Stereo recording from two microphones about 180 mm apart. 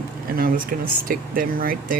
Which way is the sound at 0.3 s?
55° right (ahead or behind).